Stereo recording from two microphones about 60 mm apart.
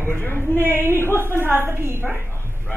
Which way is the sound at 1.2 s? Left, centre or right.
Right.